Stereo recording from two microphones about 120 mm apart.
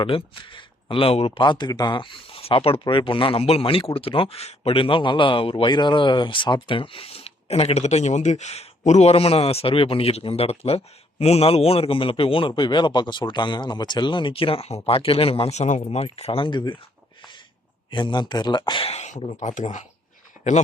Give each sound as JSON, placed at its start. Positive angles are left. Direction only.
{"t": 0.0, "sound": "speech", "side_deg": 45}
{"t": 1.5, "sound": "speech", "side_deg": 35}
{"t": 15.8, "sound": "speech", "side_deg": 55}
{"t": 17.9, "sound": "speech", "side_deg": 40}
{"t": 18.9, "sound": "speech", "side_deg": 70}
{"t": 20.4, "sound": "a sound", "side_deg": -15}